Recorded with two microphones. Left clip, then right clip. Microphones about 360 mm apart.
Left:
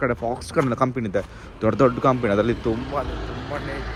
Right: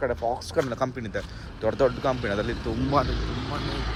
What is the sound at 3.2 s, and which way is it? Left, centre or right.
Speech, centre.